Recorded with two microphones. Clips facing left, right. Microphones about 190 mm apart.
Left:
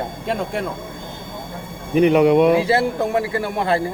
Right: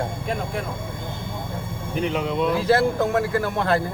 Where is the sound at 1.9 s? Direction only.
70° left (ahead or behind).